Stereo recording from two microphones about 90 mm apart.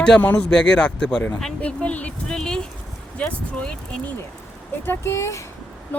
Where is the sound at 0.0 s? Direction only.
15° left (ahead or behind).